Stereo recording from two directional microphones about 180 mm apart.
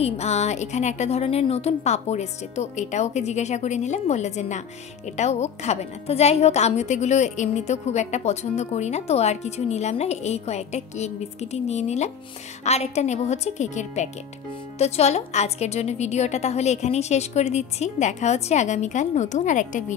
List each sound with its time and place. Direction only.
0.0 s a woman's voice: 35° left (ahead or behind)